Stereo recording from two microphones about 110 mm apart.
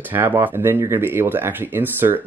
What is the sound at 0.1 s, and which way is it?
Speech, 20° right (ahead or behind).